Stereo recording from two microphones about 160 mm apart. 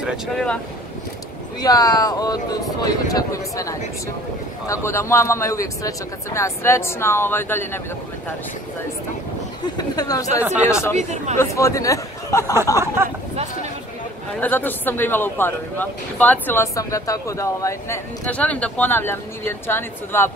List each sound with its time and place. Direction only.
0.0 s speech: 5° left (ahead or behind)
1.6 s speech: 25° left (ahead or behind)
9.8 s speech: 25° left (ahead or behind)
11.0 s speech: 50° right (ahead or behind)
11.3 s speech: 20° left (ahead or behind)
12.7 s speech: 15° right (ahead or behind)
14.4 s speech: 10° left (ahead or behind)